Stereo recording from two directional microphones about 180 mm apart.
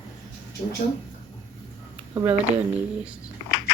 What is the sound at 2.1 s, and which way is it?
Speech, 15° right (ahead or behind).